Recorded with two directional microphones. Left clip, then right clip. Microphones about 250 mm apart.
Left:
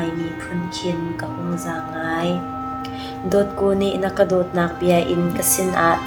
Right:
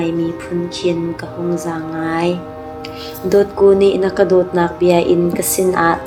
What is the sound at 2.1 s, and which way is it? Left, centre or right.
A woman's voice, right.